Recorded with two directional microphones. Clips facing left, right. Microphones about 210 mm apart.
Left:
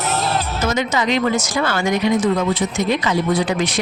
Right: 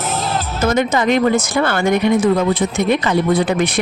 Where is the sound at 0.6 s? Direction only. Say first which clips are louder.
Right 5 dB; 55° right (ahead or behind).